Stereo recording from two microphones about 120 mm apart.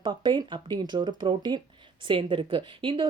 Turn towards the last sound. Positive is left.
turn(degrees=-45)  # may be behind; listen again after turning